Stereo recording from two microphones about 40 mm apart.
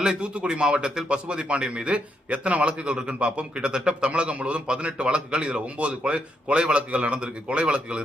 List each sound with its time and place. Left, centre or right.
0.2 s a man's voice: right